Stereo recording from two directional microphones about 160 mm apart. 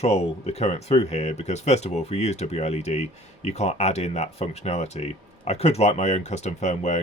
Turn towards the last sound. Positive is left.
turn(degrees=45)  # may be behind; listen again after turning